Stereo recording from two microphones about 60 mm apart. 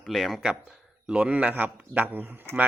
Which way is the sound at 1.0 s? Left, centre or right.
Centre.